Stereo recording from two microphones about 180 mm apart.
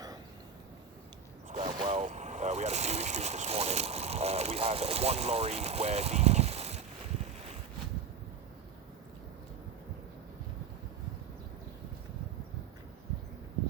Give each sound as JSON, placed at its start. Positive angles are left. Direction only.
{"t": 1.6, "sound": "speech", "side_deg": -30}